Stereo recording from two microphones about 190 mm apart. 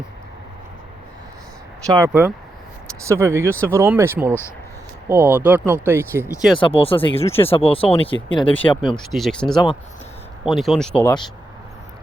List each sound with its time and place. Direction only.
1.9 s speech: 15° right (ahead or behind)
6.6 s speech: 30° left (ahead or behind)
8.4 s speech: 5° left (ahead or behind)
8.7 s speech: 25° left (ahead or behind)
9.1 s speech: centre (ahead or behind)